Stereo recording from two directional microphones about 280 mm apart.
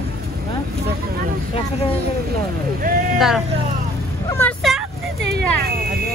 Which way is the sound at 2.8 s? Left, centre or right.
Right.